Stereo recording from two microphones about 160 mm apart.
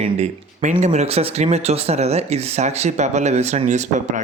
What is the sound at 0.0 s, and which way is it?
Speech, 45° right (ahead or behind).